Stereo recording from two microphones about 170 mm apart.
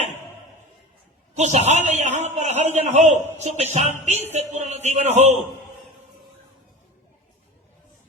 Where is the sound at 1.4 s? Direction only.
40° right (ahead or behind).